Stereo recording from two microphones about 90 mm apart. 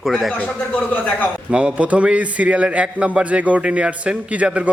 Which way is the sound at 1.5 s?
10° right (ahead or behind).